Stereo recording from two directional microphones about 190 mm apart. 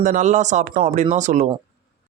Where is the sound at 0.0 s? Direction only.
40° right (ahead or behind).